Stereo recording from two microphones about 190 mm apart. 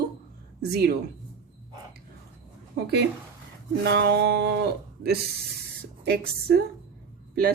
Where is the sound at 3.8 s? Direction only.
60° right (ahead or behind).